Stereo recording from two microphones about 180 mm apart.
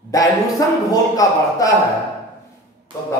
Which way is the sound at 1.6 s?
20° left (ahead or behind).